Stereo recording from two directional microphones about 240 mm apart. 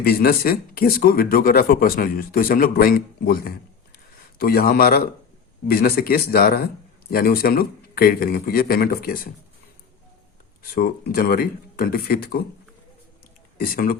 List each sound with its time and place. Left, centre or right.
0.0 s speech: left
3.9 s a sound: left
5.6 s speech: left
10.6 s speech: left
13.6 s speech: left